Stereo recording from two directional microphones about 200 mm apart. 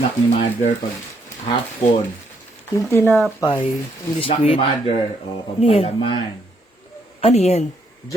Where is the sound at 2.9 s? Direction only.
10° left (ahead or behind).